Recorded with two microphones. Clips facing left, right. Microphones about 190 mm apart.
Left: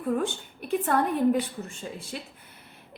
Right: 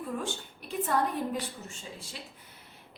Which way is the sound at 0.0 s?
55° left (ahead or behind).